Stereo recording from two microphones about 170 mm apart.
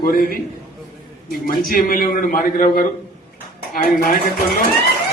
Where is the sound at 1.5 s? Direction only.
60° left (ahead or behind).